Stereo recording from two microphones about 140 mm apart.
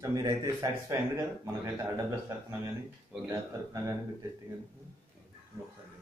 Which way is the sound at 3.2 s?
25° right (ahead or behind).